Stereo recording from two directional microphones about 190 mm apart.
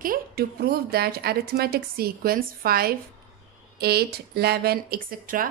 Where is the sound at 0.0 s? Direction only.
50° right (ahead or behind).